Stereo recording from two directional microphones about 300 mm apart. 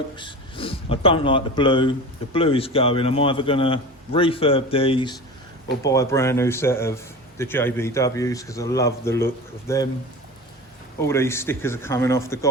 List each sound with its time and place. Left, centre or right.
0.2 s a man's voice: centre
11.0 s a man's voice: centre